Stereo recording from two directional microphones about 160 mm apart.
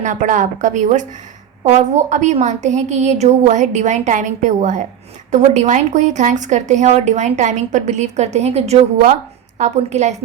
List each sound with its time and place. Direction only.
0.0 s a woman's voice: 50° right (ahead or behind)